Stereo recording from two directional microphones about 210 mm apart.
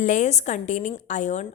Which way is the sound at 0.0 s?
35° left (ahead or behind).